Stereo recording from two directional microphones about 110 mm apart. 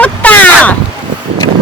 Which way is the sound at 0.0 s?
15° left (ahead or behind).